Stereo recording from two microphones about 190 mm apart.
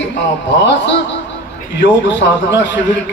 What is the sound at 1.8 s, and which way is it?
Speech, 70° left (ahead or behind).